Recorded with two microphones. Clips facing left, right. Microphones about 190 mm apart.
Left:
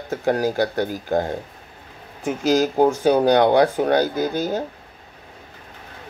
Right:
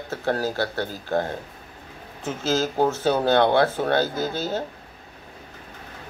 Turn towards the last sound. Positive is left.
turn(degrees=15)  # may be behind; listen again after turning